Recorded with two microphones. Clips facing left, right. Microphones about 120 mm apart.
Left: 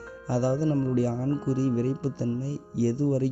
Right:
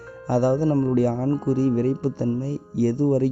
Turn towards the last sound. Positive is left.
turn(degrees=-50)  # may be behind; listen again after turning